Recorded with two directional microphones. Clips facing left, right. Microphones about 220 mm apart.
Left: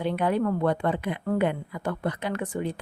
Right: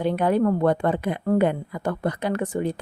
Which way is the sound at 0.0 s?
45° right (ahead or behind).